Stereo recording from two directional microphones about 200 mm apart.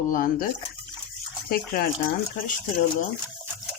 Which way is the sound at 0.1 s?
45° left (ahead or behind).